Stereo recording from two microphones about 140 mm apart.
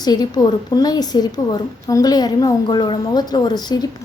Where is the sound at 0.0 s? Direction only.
30° left (ahead or behind).